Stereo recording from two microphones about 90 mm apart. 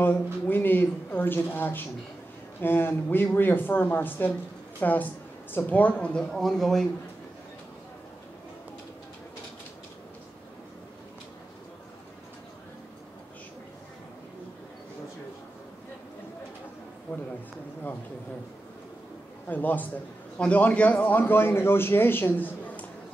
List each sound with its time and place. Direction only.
0.0 s a man's voice: 20° left (ahead or behind)
6.4 s a man's voice: centre (ahead or behind)
17.1 s a sound: 20° left (ahead or behind)
19.5 s a man's voice: 20° left (ahead or behind)